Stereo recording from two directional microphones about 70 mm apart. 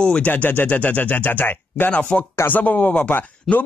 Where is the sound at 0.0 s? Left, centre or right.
Centre.